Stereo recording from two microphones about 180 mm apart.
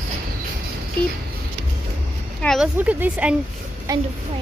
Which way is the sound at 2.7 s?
10° right (ahead or behind).